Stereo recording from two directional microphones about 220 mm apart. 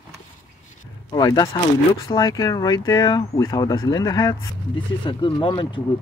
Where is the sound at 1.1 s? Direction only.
20° left (ahead or behind).